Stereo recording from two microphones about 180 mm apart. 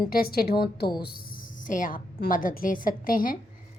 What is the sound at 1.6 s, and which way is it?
A woman's voice, 45° left (ahead or behind).